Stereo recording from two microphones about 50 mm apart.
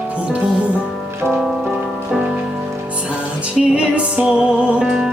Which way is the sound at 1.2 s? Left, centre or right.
Centre.